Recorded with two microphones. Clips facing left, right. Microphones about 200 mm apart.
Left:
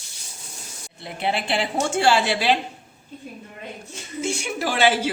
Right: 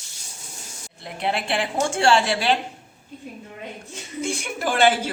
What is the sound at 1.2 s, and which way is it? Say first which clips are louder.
Speech: even; centre (ahead or behind).